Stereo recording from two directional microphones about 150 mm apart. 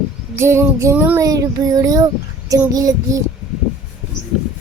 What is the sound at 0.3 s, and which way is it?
Speech, 15° right (ahead or behind).